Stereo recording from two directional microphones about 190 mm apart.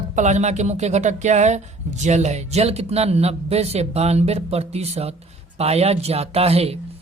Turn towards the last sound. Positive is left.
turn(degrees=-35)  # may be behind; listen again after turning